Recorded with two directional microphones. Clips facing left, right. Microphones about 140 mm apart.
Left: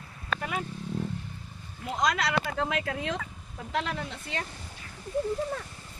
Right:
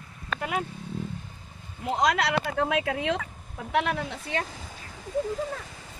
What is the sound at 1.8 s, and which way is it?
Speech, 65° right (ahead or behind).